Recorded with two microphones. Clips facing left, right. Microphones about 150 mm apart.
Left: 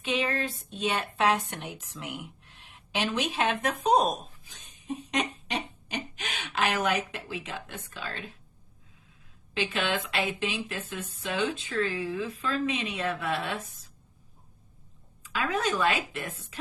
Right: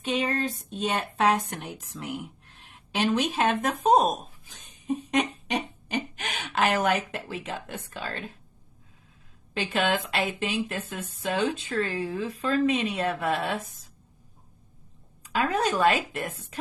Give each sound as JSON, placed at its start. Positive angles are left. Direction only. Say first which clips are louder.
{"t": 0.0, "sound": "speech", "louder": "right 2 dB", "side_deg": -45}
{"t": 9.6, "sound": "speech", "louder": "right 3 dB", "side_deg": -40}
{"t": 15.3, "sound": "speech", "louder": "right 3 dB", "side_deg": -40}